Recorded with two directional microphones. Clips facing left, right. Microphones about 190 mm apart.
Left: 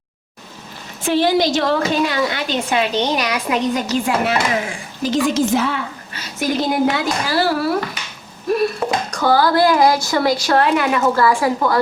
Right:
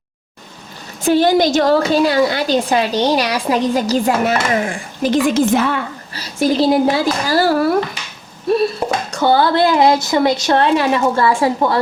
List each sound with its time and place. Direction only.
1.0 s a woman's voice: 45° right (ahead or behind)
6.1 s a woman's voice: 30° right (ahead or behind)
9.0 s a woman's voice: 25° right (ahead or behind)